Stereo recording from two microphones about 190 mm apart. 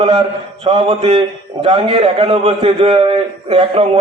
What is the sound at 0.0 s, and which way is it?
A man's voice, 25° right (ahead or behind).